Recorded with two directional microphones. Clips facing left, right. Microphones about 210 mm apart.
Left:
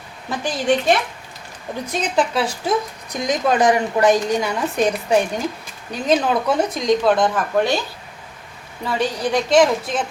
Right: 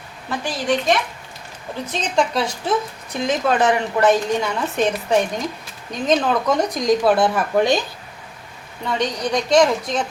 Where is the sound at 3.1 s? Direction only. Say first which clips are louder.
Left 1 dB; 15° left (ahead or behind); by 7.8 s 15° right (ahead or behind).